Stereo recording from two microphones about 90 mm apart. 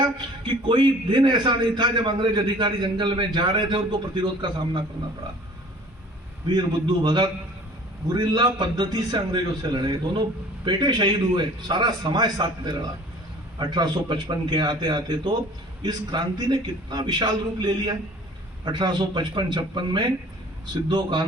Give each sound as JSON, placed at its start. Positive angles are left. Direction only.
{"t": 0.0, "sound": "a man's voice", "side_deg": -65}
{"t": 6.5, "sound": "a man's voice", "side_deg": -50}